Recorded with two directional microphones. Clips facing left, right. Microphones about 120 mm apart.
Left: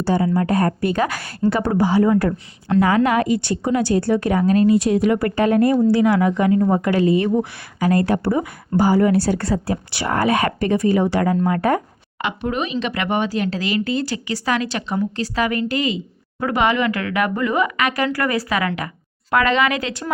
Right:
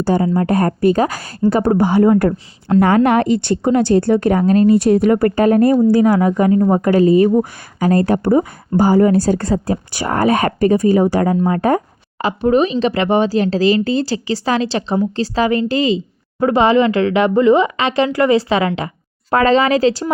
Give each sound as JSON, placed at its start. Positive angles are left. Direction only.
{"t": 0.0, "sound": "speech", "side_deg": -45}